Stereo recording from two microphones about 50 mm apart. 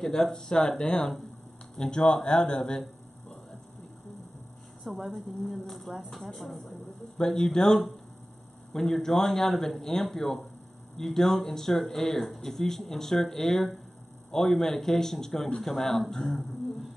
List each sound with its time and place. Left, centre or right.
0.0 s speech: centre
4.9 s speech: centre